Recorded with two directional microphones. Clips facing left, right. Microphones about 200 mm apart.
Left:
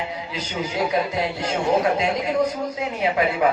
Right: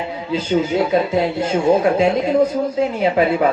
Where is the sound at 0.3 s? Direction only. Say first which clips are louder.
Right 9 dB; 25° right (ahead or behind).